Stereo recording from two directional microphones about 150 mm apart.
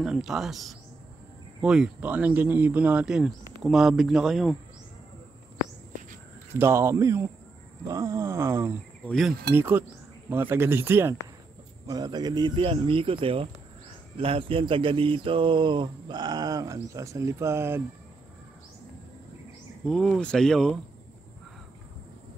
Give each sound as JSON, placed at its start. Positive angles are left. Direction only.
{"t": 0.0, "sound": "speech", "side_deg": 0}
{"t": 6.6, "sound": "a sound", "side_deg": -20}
{"t": 7.9, "sound": "speech", "side_deg": -20}
{"t": 9.0, "sound": "speech", "side_deg": 5}
{"t": 9.6, "sound": "speech", "side_deg": -15}
{"t": 11.9, "sound": "speech", "side_deg": -25}
{"t": 14.1, "sound": "a sound", "side_deg": -40}
{"t": 19.9, "sound": "speech", "side_deg": 5}